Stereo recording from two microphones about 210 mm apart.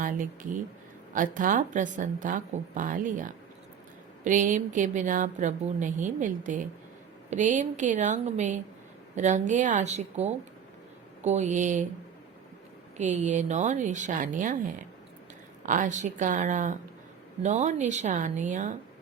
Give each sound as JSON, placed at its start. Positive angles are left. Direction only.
{"t": 0.0, "sound": "speech", "side_deg": -40}
{"t": 13.0, "sound": "speech", "side_deg": -35}
{"t": 15.6, "sound": "speech", "side_deg": -40}